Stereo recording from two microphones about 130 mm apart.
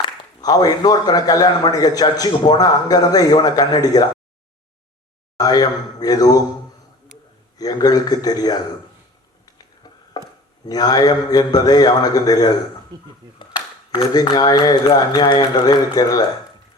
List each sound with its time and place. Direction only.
0.4 s a man's voice: 30° left (ahead or behind)
5.4 s a man's voice: 30° left (ahead or behind)
7.6 s a man's voice: 30° left (ahead or behind)
9.8 s a sound: 30° left (ahead or behind)
10.7 s a man's voice: 30° left (ahead or behind)
12.9 s speech: 30° right (ahead or behind)
14.1 s a man's voice: 30° left (ahead or behind)